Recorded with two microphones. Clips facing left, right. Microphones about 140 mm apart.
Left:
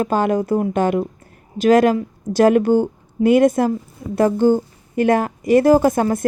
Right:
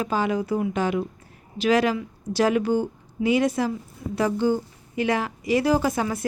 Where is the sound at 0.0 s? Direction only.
50° left (ahead or behind).